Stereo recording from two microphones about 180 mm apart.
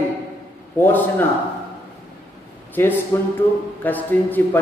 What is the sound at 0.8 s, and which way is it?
Speech, 10° left (ahead or behind).